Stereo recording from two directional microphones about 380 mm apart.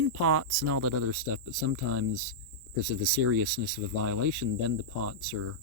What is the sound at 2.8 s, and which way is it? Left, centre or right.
Speech, right.